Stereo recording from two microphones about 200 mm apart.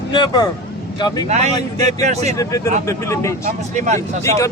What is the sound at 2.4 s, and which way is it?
Speech, 15° left (ahead or behind).